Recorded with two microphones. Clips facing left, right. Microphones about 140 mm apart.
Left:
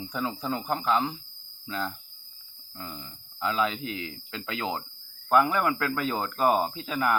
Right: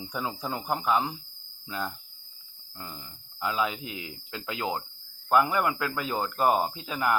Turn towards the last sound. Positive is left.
turn(degrees=-10)  # may be behind; listen again after turning